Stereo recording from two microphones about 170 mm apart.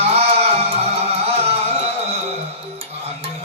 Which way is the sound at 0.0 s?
35° right (ahead or behind).